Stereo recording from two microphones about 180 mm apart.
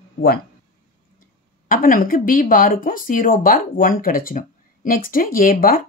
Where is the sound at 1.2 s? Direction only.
50° left (ahead or behind).